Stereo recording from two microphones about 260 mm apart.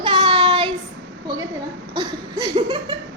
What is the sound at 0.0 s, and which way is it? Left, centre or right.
Child singing, centre.